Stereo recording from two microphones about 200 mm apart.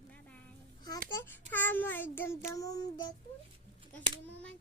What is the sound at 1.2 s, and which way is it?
Child singing, 10° left (ahead or behind).